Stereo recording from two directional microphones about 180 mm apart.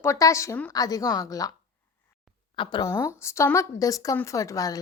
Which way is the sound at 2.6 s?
25° left (ahead or behind).